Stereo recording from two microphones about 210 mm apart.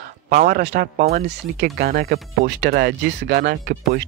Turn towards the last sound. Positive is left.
turn(degrees=-45)  # may be behind; listen again after turning